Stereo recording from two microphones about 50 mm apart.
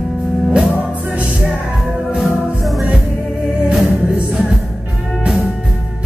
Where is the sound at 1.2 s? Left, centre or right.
Right.